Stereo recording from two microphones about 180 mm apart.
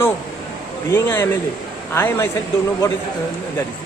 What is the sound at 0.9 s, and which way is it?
Speech, 15° left (ahead or behind).